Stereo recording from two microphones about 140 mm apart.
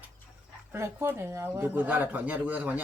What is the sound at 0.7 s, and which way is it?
Speech, 15° right (ahead or behind).